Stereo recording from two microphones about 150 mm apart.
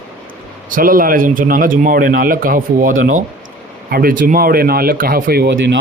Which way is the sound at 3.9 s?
75° right (ahead or behind).